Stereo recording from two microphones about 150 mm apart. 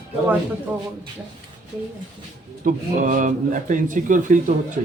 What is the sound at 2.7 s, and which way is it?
Speech, 60° right (ahead or behind).